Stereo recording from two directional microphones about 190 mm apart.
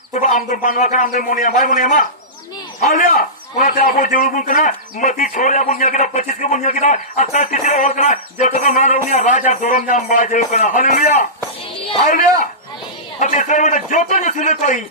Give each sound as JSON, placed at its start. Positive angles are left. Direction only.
{"t": 0.1, "sound": "a man's voice", "side_deg": 40}
{"t": 13.1, "sound": "a man's voice", "side_deg": 40}